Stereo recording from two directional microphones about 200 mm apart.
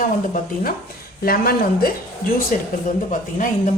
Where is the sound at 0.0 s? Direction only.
45° left (ahead or behind).